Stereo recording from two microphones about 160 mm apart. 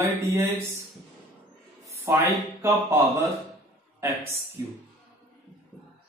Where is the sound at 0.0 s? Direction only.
15° right (ahead or behind).